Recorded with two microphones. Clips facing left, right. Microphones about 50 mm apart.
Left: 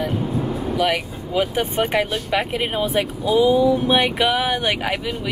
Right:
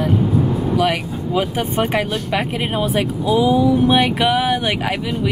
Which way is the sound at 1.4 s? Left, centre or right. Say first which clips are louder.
Left 1 dB; centre.